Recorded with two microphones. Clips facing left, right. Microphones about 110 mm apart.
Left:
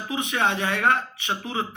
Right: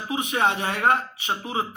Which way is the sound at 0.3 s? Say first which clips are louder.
Right 1 dB; 45° right (ahead or behind).